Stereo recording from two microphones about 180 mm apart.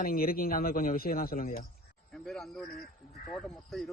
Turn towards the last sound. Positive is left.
turn(degrees=0)  # may be behind; listen again after turning